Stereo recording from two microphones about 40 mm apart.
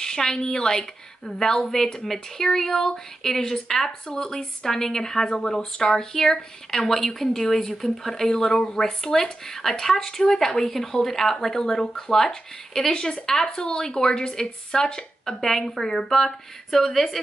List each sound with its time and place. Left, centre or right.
0.0 s speech: centre